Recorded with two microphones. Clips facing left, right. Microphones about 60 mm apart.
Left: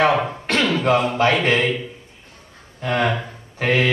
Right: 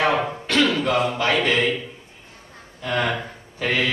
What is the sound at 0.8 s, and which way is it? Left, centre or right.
Mantra, left.